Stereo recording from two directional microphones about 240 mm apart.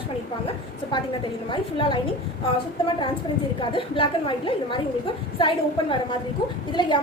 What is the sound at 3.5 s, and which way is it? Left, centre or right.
A woman's voice, left.